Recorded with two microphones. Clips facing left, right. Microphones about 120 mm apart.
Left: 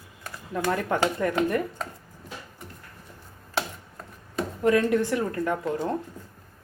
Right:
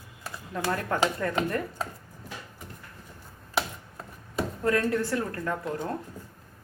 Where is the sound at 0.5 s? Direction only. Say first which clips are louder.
Left 3 dB; 20° left (ahead or behind).